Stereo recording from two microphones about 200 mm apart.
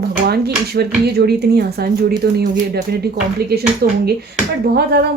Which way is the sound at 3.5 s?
55° right (ahead or behind).